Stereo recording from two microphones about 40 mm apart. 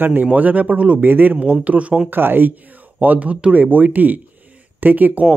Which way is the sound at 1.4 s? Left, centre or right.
Right.